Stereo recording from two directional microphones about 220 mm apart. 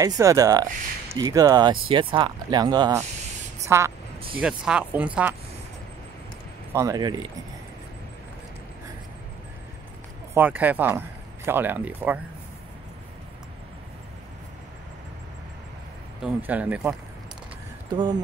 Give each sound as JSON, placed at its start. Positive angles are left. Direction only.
{"t": 0.0, "sound": "a woman's voice", "side_deg": -15}
{"t": 6.7, "sound": "speech", "side_deg": -15}
{"t": 10.3, "sound": "speech", "side_deg": -10}
{"t": 16.2, "sound": "speech", "side_deg": -5}
{"t": 17.9, "sound": "speech", "side_deg": -20}